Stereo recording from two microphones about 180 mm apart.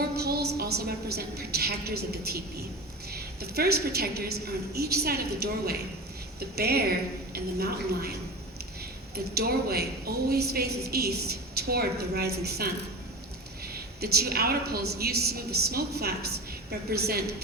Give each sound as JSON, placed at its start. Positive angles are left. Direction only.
{"t": 0.2, "sound": "a woman's voice", "side_deg": -60}
{"t": 9.1, "sound": "a woman's voice", "side_deg": -60}
{"t": 14.0, "sound": "a woman's voice", "side_deg": -60}